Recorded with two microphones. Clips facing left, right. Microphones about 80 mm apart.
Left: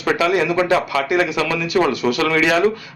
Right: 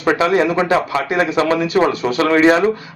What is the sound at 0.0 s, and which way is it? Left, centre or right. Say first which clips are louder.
A man's voice: right 3 dB; right.